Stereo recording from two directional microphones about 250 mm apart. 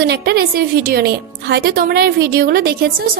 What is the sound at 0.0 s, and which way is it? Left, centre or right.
A woman's voice, right.